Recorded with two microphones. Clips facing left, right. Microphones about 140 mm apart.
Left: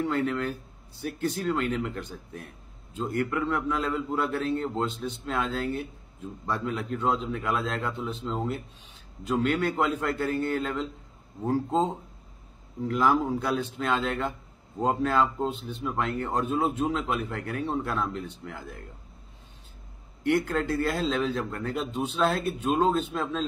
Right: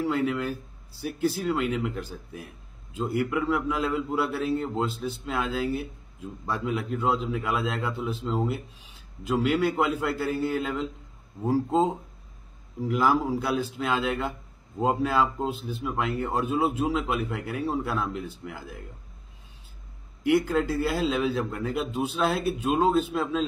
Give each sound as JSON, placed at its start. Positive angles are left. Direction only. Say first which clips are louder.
{"t": 0.0, "sound": "speech", "louder": "right 1 dB", "side_deg": -5}
{"t": 20.2, "sound": "speech", "louder": "right 2 dB", "side_deg": -5}